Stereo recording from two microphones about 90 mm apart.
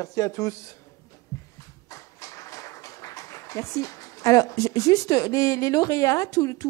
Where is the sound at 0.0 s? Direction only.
35° left (ahead or behind).